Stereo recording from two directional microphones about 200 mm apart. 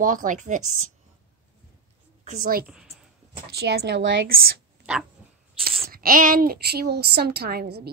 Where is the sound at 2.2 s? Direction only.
45° right (ahead or behind).